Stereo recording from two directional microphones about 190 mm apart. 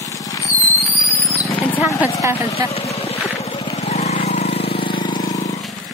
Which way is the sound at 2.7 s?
30° left (ahead or behind).